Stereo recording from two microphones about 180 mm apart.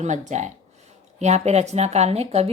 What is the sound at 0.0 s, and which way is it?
Speech, 40° right (ahead or behind).